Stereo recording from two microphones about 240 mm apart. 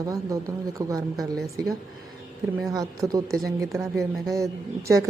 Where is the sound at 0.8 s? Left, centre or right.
Centre.